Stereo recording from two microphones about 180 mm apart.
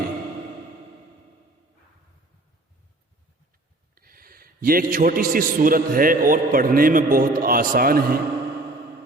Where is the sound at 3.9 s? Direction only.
55° right (ahead or behind).